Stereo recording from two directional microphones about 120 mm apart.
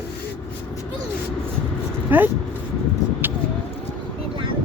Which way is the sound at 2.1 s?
15° right (ahead or behind).